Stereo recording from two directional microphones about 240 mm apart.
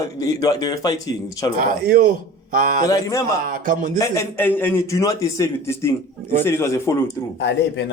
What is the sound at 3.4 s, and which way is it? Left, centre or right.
Speech, right.